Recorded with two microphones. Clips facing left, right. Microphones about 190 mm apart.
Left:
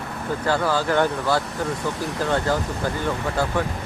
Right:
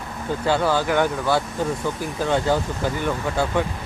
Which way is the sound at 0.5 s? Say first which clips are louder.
Right 1 dB; 20° right (ahead or behind).